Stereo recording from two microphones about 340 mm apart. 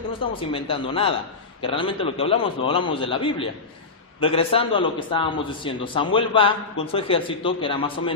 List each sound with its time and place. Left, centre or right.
0.5 s a man's voice: centre